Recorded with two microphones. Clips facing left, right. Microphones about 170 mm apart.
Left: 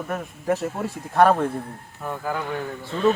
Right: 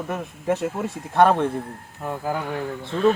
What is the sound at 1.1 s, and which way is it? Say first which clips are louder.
Speech: even; 5° left (ahead or behind).